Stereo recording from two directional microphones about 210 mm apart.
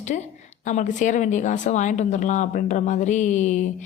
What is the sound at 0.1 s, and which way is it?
Speech, 40° left (ahead or behind).